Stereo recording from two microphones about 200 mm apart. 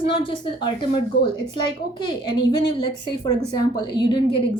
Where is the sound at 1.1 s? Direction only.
55° left (ahead or behind).